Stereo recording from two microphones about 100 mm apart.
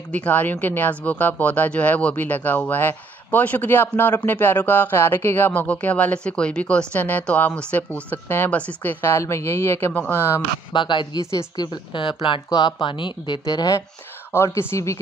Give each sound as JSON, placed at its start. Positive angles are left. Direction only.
{"t": 0.1, "sound": "speech", "side_deg": 15}
{"t": 9.0, "sound": "speech", "side_deg": 30}
{"t": 10.7, "sound": "speech", "side_deg": 50}
{"t": 11.2, "sound": "a woman's voice", "side_deg": 30}
{"t": 11.6, "sound": "speech", "side_deg": 50}
{"t": 12.4, "sound": "speech", "side_deg": 45}
{"t": 14.3, "sound": "speech", "side_deg": 25}